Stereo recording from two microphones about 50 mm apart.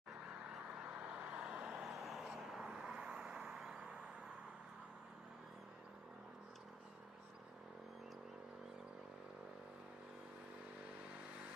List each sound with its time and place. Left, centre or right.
0.7 s vehicle: right
1.8 s vehicle: centre; by 4.0 s right